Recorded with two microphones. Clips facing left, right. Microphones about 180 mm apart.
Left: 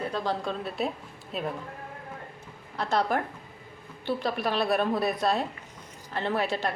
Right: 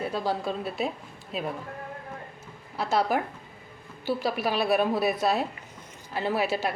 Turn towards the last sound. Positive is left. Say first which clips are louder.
# right 1 dB
turn(degrees=-5)  # may be behind; listen again after turning